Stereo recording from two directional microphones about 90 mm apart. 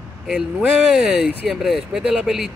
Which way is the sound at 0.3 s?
5° right (ahead or behind).